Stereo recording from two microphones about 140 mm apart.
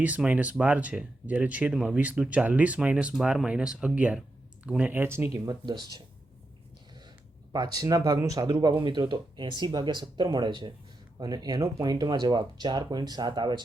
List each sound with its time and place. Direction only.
0.0 s speech: 10° right (ahead or behind); by 5.9 s 30° right (ahead or behind)
7.5 s speech: 25° right (ahead or behind)